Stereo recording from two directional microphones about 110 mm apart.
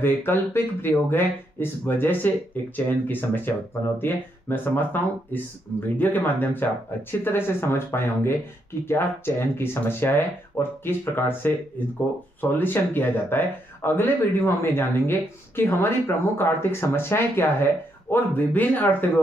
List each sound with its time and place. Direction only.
0.0 s speech: 20° left (ahead or behind)